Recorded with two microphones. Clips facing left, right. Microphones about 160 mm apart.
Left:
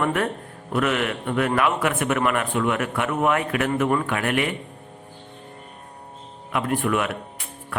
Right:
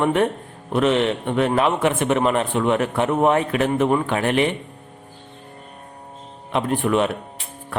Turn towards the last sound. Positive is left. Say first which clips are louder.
# right 3 dB
turn(degrees=-30)  # may be behind; listen again after turning